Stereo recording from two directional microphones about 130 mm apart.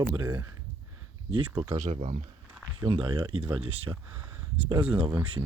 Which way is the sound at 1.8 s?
65° right (ahead or behind).